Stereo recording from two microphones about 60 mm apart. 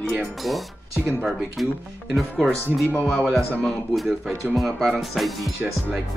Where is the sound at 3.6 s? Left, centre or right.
Centre.